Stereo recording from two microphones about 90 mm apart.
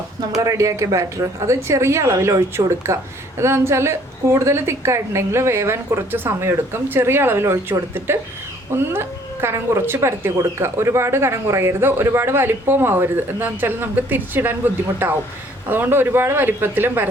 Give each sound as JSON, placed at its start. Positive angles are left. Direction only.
{"t": 0.4, "sound": "speech", "side_deg": -35}